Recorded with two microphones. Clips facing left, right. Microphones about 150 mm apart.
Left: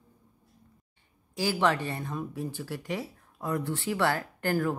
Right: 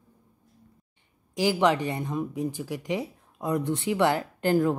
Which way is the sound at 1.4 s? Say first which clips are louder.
Right 4 dB; 15° right (ahead or behind).